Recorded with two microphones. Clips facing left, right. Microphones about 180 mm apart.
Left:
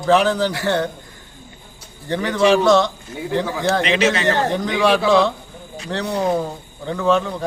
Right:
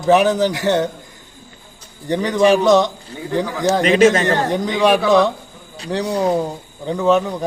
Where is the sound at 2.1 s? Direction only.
15° right (ahead or behind).